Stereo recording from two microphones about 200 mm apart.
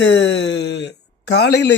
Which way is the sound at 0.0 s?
65° left (ahead or behind).